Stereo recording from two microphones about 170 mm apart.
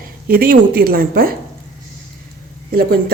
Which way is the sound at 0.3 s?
60° right (ahead or behind).